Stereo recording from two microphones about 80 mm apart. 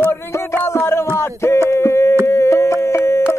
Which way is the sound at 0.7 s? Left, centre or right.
Left.